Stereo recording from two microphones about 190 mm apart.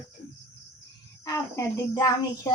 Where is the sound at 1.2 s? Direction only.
15° left (ahead or behind).